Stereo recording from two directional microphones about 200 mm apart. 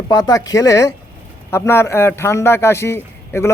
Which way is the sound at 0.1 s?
20° left (ahead or behind).